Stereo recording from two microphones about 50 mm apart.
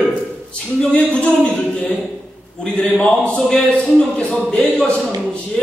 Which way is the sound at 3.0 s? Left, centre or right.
Centre.